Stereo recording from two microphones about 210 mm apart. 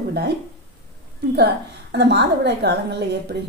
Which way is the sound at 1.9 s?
55° right (ahead or behind).